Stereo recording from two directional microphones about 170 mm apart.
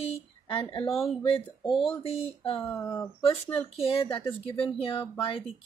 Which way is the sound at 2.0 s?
35° left (ahead or behind).